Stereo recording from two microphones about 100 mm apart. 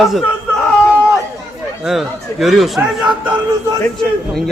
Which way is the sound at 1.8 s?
5° right (ahead or behind).